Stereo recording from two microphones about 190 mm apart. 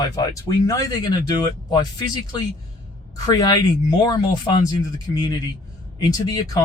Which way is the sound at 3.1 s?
20° left (ahead or behind).